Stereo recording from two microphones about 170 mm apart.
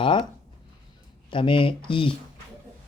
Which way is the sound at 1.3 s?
30° left (ahead or behind).